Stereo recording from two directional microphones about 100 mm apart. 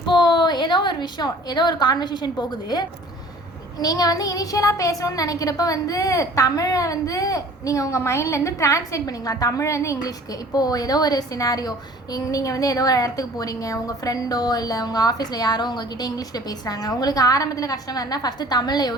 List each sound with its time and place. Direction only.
0.0 s a woman's voice: 50° left (ahead or behind)